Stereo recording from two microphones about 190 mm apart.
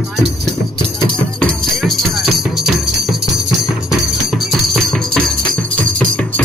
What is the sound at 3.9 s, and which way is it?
Music, centre (ahead or behind).